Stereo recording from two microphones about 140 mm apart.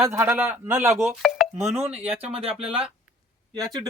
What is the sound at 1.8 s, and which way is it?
A man's voice, 10° right (ahead or behind).